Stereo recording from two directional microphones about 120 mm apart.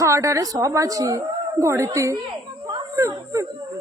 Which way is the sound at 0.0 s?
25° right (ahead or behind).